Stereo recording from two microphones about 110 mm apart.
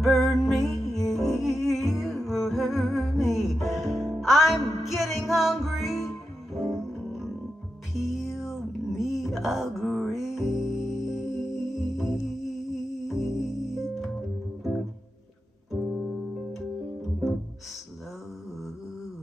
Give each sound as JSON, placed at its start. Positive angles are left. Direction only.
{"t": 0.0, "sound": "music", "side_deg": 0}